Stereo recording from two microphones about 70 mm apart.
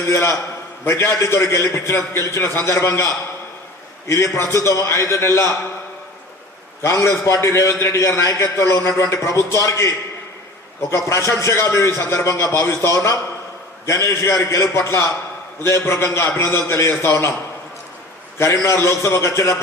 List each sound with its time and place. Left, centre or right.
0.0 s a man's voice: left
6.8 s a man's voice: left
18.3 s a man's voice: left